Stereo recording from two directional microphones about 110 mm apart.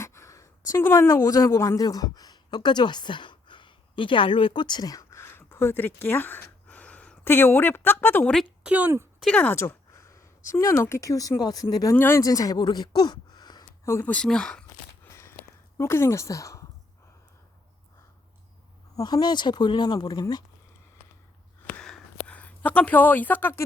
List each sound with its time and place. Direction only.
0.0 s a woman's voice: 25° left (ahead or behind)
8.4 s a woman's voice: 10° right (ahead or behind)
9.2 s speech: 10° left (ahead or behind)
9.6 s speech: 25° left (ahead or behind)
11.9 s speech: 20° left (ahead or behind)
12.2 s speech: 30° left (ahead or behind)
13.8 s speech: 25° left (ahead or behind)
14.1 s speech: 10° left (ahead or behind)
15.0 s a sound: 20° left (ahead or behind)
15.8 s speech: 25° left (ahead or behind)
18.9 s speech: 40° left (ahead or behind)
21.7 s a sound: 5° left (ahead or behind)